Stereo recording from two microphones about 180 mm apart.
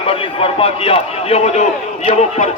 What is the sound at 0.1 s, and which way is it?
A man's voice, 30° left (ahead or behind).